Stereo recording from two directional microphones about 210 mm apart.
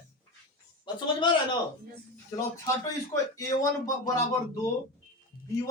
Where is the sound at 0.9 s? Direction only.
20° left (ahead or behind).